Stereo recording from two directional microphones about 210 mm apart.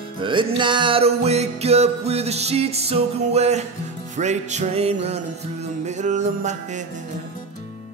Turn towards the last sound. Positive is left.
turn(degrees=-35)  # may be behind; listen again after turning